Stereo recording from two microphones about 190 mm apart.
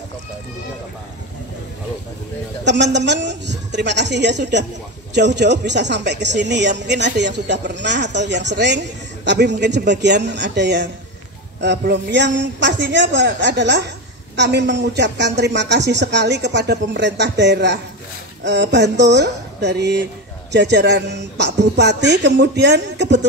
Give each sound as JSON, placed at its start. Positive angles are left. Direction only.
{"t": 2.6, "sound": "a woman's voice", "side_deg": -65}